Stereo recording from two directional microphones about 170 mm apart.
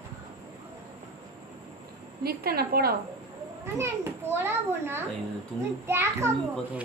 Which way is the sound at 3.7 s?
15° right (ahead or behind).